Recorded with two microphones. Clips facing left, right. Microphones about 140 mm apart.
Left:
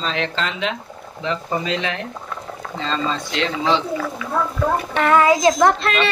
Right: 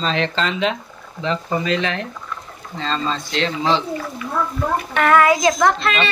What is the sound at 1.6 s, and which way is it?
Speech, 15° left (ahead or behind).